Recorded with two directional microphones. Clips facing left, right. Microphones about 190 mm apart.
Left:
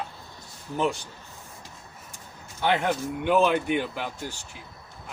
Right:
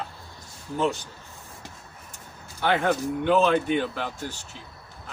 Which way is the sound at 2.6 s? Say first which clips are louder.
Right 1 dB; 15° left (ahead or behind).